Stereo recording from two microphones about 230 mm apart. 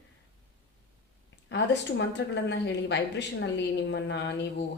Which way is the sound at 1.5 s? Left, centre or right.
Left.